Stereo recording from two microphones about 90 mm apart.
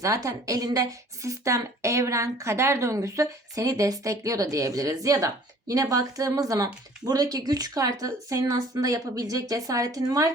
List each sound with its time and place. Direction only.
0.0 s a woman's voice: 35° right (ahead or behind)